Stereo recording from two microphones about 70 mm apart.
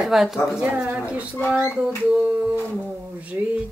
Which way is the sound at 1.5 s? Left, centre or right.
Centre.